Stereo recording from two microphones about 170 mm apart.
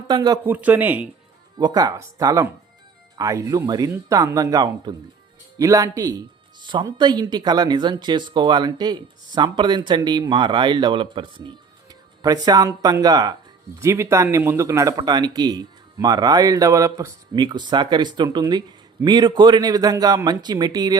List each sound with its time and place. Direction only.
0.1 s speech: 25° right (ahead or behind)
0.4 s a man's voice: 10° right (ahead or behind)
1.5 s speech: 25° right (ahead or behind)